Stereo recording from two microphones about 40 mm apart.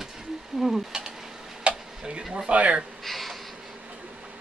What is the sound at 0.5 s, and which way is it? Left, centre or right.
Mechanisms, centre.